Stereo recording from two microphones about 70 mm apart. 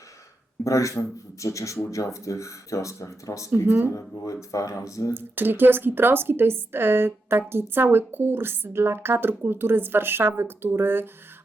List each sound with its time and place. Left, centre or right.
0.6 s a sound: left
1.4 s speech: left
3.7 s speech: right
3.9 s speech: left
5.1 s a woman's voice: right